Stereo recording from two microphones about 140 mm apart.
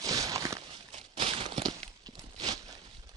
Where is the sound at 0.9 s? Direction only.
40° right (ahead or behind).